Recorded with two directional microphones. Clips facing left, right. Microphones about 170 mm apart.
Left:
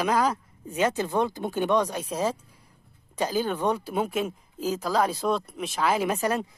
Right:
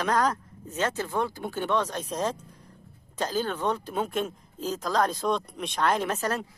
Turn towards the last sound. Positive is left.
turn(degrees=10)  # may be behind; listen again after turning